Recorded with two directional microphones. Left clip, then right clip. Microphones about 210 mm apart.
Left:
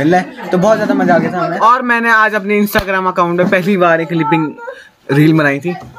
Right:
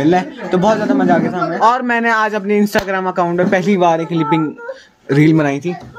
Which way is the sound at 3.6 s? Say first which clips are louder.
Left 2 dB; 45° left (ahead or behind).